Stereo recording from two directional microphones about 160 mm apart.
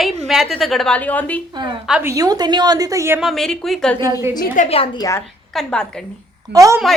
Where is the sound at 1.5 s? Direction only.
25° right (ahead or behind).